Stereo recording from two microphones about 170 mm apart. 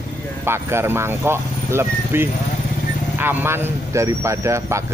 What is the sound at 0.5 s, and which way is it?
A man's voice, 15° right (ahead or behind).